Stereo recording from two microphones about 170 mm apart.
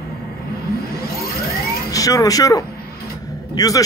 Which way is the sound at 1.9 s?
20° left (ahead or behind).